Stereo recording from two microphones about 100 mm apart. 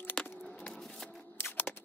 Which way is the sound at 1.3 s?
20° left (ahead or behind).